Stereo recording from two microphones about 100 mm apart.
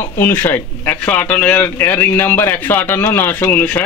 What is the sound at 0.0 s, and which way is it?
Speech, 25° left (ahead or behind).